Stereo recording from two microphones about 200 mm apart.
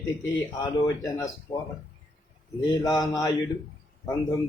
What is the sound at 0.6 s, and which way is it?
Speech, 15° left (ahead or behind).